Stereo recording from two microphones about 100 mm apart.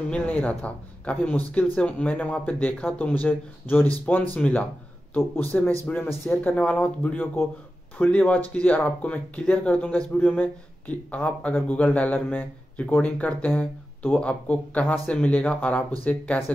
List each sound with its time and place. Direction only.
0.1 s speech: 15° left (ahead or behind)